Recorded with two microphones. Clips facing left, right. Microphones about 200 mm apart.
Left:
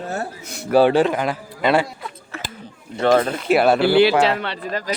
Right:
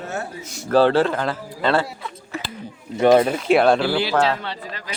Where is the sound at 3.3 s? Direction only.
Centre (ahead or behind).